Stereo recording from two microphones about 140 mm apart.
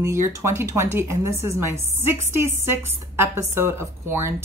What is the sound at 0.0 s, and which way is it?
Speech, 20° right (ahead or behind).